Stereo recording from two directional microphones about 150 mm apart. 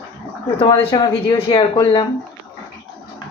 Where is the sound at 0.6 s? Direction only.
35° left (ahead or behind).